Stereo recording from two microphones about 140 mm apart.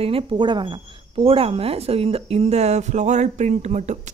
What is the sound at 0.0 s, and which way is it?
A woman's voice, 40° right (ahead or behind).